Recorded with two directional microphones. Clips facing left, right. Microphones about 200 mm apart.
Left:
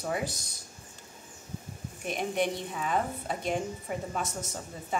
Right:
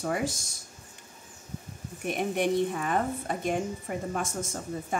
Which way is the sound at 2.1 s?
50° right (ahead or behind).